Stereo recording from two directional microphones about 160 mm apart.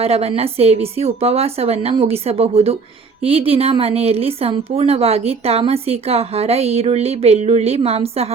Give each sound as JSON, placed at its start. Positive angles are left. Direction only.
{"t": 0.0, "sound": "a woman's voice", "side_deg": -40}